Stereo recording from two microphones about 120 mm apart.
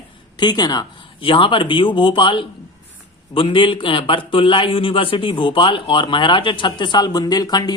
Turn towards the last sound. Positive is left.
turn(degrees=35)  # may be behind; listen again after turning